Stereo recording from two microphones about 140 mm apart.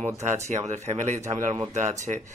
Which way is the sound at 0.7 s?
55° right (ahead or behind).